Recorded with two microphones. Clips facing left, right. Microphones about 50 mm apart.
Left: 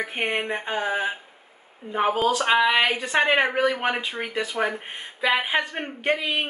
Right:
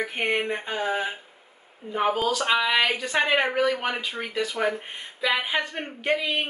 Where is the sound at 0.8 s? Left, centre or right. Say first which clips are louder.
Left 2 dB; centre.